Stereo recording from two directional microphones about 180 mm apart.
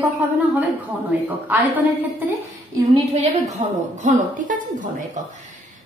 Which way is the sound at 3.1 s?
40° right (ahead or behind).